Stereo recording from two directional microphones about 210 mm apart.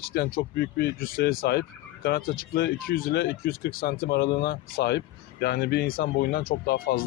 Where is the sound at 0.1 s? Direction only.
45° left (ahead or behind).